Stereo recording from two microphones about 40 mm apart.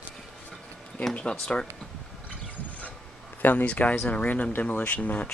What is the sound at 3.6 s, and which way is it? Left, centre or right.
Speech, left.